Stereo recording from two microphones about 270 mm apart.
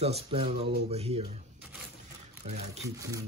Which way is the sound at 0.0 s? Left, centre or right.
Right.